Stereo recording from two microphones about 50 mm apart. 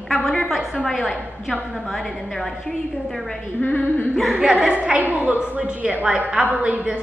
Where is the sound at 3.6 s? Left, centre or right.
Left.